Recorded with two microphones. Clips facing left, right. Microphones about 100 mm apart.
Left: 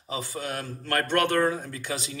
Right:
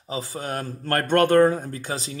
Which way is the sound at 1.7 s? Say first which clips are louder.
Right 3 dB; 35° right (ahead or behind).